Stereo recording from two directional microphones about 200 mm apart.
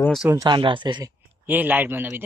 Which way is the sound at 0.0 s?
Centre (ahead or behind).